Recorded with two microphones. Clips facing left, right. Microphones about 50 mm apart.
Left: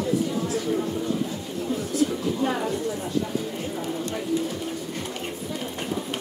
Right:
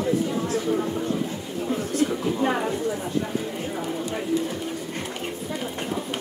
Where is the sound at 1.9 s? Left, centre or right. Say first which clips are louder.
Even; right.